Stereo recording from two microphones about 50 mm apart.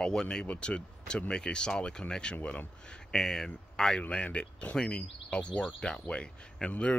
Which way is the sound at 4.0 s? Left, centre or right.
Left.